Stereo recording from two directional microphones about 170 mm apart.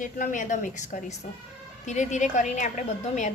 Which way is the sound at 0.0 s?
50° left (ahead or behind).